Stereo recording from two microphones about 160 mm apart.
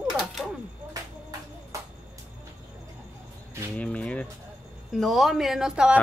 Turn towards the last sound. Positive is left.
turn(degrees=-5)  # may be behind; listen again after turning